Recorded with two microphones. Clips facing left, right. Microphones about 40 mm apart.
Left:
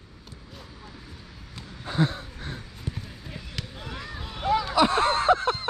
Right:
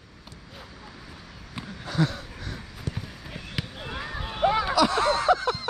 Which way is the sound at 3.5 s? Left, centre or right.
Right.